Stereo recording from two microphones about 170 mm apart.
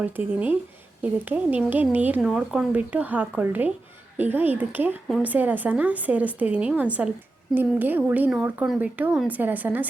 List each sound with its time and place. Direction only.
0.0 s speech: 10° right (ahead or behind)